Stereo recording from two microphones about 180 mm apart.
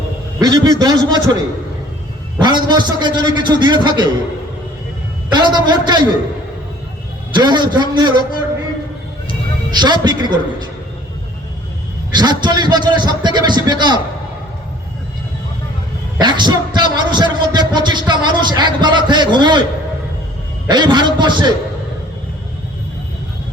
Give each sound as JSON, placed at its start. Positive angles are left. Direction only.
{"t": 0.3, "sound": "a man's voice", "side_deg": -20}
{"t": 2.4, "sound": "a man's voice", "side_deg": -25}
{"t": 5.3, "sound": "a man's voice", "side_deg": -25}
{"t": 7.3, "sound": "a man's voice", "side_deg": -25}
{"t": 9.7, "sound": "a man's voice", "side_deg": -25}
{"t": 12.1, "sound": "a man's voice", "side_deg": -25}
{"t": 16.1, "sound": "a man's voice", "side_deg": -25}
{"t": 20.7, "sound": "a man's voice", "side_deg": -25}